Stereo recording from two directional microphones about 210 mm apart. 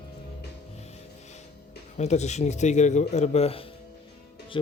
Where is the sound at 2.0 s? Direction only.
30° left (ahead or behind).